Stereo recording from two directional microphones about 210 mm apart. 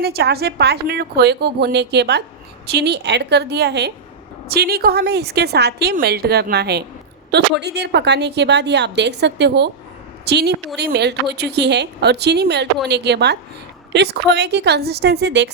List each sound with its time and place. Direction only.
0.0 s a woman's voice: 50° right (ahead or behind)